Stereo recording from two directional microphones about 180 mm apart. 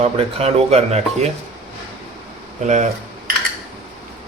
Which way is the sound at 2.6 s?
40° right (ahead or behind).